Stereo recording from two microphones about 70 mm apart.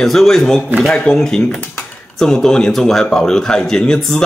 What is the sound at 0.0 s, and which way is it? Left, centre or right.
Speech, centre.